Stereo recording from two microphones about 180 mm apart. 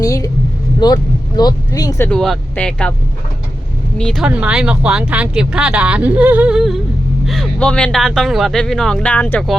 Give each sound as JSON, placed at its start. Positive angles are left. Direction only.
{"t": 0.0, "sound": "vehicle", "side_deg": 20}
{"t": 0.8, "sound": "speech", "side_deg": 25}
{"t": 2.0, "sound": "speech", "side_deg": 0}
{"t": 3.9, "sound": "speech", "side_deg": 5}